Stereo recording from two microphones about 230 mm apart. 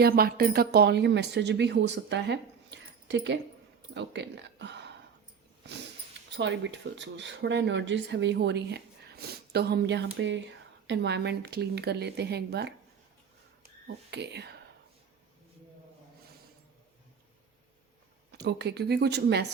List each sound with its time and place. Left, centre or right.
0.0 s speech: right
6.3 s speech: right
13.8 s speech: right
18.3 s speech: right